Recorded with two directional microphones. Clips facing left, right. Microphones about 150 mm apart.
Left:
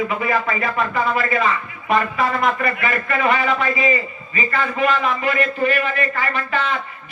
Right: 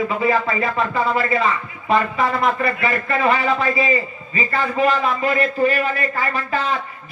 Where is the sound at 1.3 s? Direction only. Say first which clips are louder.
Even; 25° right (ahead or behind).